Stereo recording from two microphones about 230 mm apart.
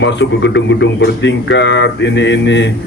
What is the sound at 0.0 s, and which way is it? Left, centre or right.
Speech, left.